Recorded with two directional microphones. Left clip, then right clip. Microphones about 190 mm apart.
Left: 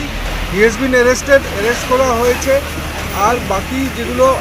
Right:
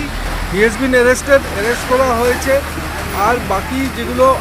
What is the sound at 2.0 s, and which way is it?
Speech, 5° right (ahead or behind).